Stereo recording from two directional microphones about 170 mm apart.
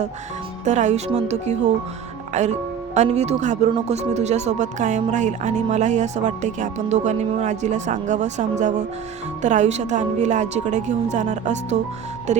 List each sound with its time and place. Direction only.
0.6 s speech: 45° right (ahead or behind)